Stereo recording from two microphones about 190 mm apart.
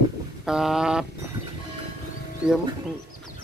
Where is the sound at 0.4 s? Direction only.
5° right (ahead or behind).